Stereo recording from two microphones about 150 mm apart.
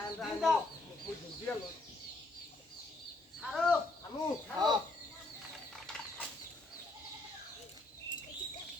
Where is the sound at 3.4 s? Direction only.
Centre (ahead or behind).